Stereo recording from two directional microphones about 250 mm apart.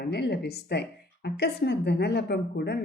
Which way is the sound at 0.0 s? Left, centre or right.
Left.